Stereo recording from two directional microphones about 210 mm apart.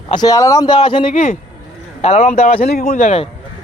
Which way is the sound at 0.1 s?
20° left (ahead or behind).